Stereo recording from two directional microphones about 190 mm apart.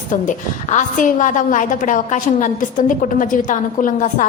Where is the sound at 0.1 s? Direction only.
40° left (ahead or behind).